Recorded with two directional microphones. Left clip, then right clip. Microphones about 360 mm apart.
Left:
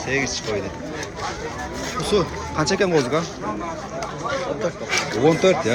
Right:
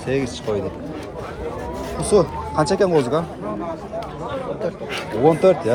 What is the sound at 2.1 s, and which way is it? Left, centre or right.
Speech, centre.